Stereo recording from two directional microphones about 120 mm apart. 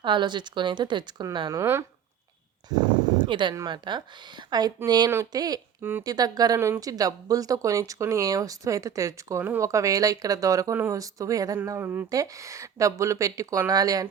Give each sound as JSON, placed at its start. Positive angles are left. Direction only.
{"t": 0.0, "sound": "speech", "side_deg": -40}
{"t": 3.2, "sound": "speech", "side_deg": -40}
{"t": 11.6, "sound": "speech", "side_deg": -20}
{"t": 12.1, "sound": "speech", "side_deg": -30}